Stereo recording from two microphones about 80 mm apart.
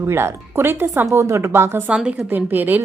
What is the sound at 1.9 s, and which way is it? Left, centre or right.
Speech, centre.